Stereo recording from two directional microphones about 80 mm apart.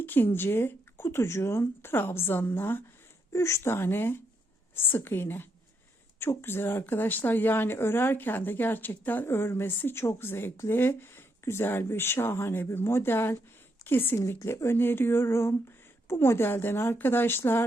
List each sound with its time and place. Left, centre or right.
0.0 s speech: left
3.3 s speech: left